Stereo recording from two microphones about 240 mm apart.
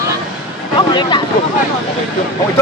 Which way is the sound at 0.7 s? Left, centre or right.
Centre.